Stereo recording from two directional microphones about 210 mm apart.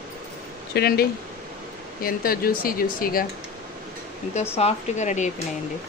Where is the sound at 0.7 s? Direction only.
50° left (ahead or behind).